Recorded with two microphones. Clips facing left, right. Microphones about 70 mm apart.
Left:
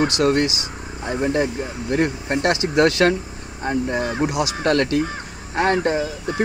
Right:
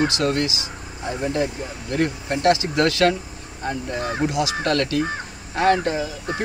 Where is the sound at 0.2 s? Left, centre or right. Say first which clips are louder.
Left 4 dB; left.